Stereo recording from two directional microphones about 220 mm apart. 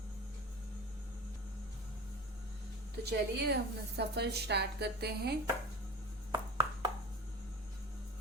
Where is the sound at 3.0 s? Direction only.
50° right (ahead or behind).